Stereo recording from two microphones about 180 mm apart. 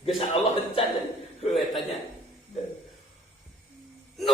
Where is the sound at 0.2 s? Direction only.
30° left (ahead or behind).